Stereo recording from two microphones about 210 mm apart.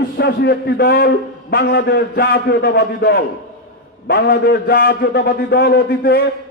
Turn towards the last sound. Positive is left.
turn(degrees=45)  # may be behind; listen again after turning